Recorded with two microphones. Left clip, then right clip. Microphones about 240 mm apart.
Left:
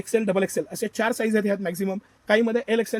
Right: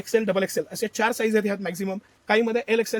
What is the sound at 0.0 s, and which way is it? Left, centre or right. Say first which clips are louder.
Speech: even; centre.